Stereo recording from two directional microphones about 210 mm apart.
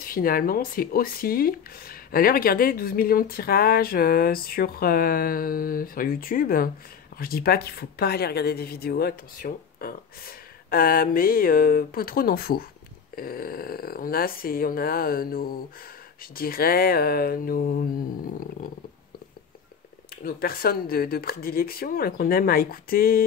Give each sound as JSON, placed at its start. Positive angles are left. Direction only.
{"t": 0.0, "sound": "speech", "side_deg": 45}
{"t": 20.2, "sound": "speech", "side_deg": 45}